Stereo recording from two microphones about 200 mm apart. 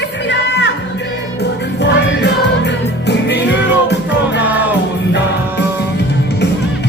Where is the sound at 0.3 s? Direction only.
60° left (ahead or behind).